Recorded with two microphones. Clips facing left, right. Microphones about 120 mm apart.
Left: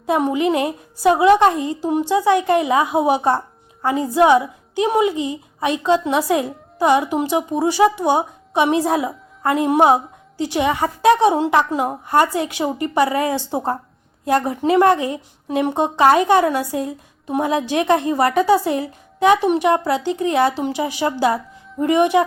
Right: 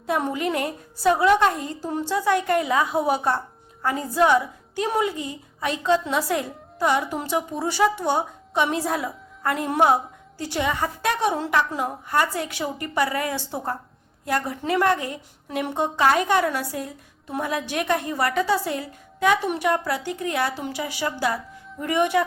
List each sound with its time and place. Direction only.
0.0 s a woman's voice: 15° left (ahead or behind)